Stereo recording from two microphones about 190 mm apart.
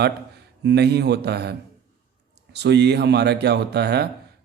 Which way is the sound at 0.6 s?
60° right (ahead or behind).